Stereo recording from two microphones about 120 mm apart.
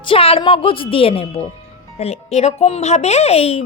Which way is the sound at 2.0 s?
60° left (ahead or behind).